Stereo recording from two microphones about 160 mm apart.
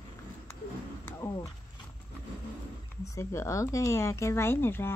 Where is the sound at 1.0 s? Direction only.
15° left (ahead or behind).